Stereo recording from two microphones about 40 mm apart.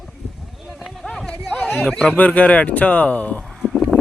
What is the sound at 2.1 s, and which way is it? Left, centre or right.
Speech, left.